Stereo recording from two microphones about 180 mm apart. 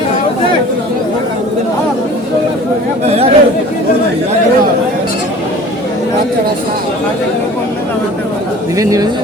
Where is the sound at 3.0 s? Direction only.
35° right (ahead or behind).